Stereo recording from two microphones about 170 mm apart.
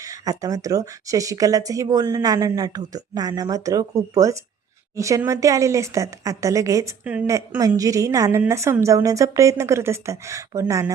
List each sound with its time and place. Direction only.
0.0 s a woman's voice: 20° right (ahead or behind)